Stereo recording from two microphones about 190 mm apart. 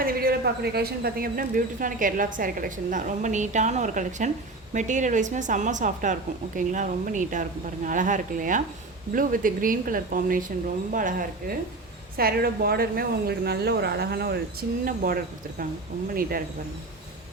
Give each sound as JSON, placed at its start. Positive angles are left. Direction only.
{"t": 0.0, "sound": "a woman's voice", "side_deg": -50}